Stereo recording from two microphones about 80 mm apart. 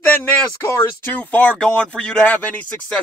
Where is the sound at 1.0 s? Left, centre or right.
Centre.